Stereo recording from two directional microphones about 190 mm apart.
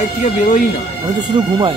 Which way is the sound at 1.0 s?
25° right (ahead or behind).